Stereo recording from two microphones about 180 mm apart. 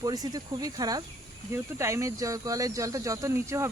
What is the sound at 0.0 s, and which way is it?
Speech, 20° right (ahead or behind).